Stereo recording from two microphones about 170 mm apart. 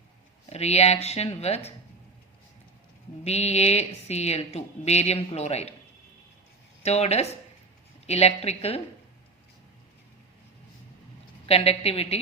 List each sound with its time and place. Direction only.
0.5 s a woman's voice: 40° left (ahead or behind)
3.2 s a woman's voice: 40° left (ahead or behind)
6.8 s a woman's voice: 40° left (ahead or behind)
11.4 s a woman's voice: 35° left (ahead or behind)